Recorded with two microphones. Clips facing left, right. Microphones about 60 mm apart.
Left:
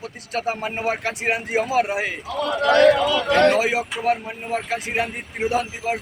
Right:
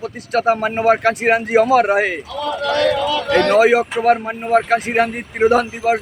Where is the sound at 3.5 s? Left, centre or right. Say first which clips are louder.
Right 8 dB; right.